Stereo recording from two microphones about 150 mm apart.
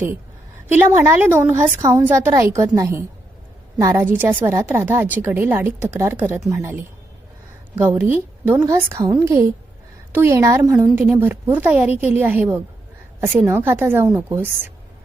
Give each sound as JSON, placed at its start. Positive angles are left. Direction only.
{"t": 0.7, "sound": "a woman's voice", "side_deg": -15}
{"t": 8.1, "sound": "a woman's voice", "side_deg": -10}